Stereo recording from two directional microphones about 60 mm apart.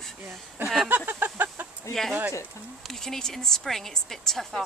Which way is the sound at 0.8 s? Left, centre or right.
Right.